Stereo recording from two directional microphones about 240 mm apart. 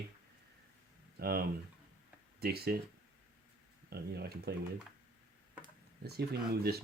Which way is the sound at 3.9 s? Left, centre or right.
Right.